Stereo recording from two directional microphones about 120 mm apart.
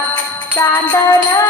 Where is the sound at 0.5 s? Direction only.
30° left (ahead or behind).